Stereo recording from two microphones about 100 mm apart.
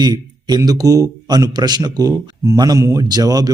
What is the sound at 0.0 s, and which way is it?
Speech, 45° right (ahead or behind).